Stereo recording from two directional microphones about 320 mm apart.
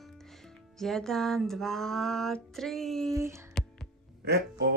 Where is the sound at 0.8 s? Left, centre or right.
Centre.